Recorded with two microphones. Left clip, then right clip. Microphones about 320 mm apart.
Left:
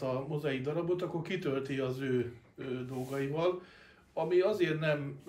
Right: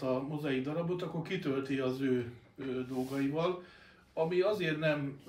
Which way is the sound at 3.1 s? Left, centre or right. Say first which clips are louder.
Left 2 dB; left.